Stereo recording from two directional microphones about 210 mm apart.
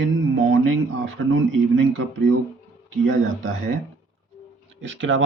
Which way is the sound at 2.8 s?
65° right (ahead or behind).